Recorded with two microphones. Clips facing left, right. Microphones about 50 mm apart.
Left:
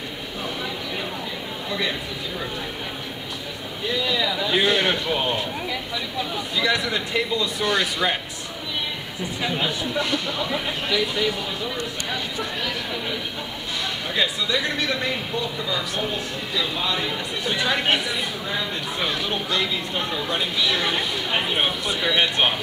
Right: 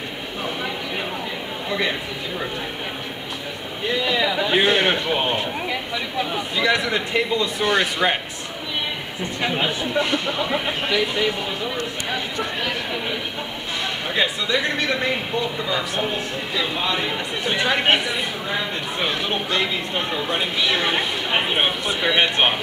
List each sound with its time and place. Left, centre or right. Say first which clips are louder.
1.7 s speech: right 3 dB; right
3.8 s speech: right 3 dB; right
9.4 s speech: right 3 dB; right